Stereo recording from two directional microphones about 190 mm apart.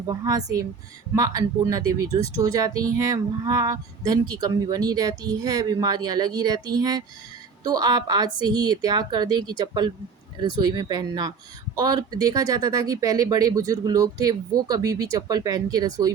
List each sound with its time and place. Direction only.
0.1 s speech: 20° right (ahead or behind)